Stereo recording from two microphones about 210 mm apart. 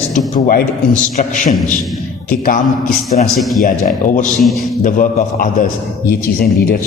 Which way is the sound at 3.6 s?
40° left (ahead or behind).